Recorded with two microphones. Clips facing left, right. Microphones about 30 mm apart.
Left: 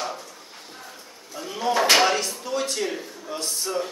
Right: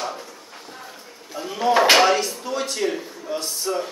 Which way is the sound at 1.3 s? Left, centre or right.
Centre.